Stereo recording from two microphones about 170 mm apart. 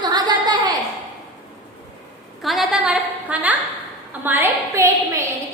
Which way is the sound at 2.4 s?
Centre (ahead or behind).